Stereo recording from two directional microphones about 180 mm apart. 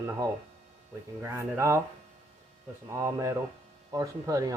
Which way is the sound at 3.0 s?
20° right (ahead or behind).